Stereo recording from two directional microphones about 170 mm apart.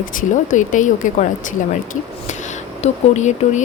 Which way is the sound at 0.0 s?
50° left (ahead or behind).